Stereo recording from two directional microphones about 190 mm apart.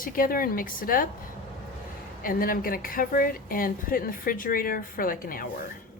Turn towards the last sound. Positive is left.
turn(degrees=50)  # may be behind; listen again after turning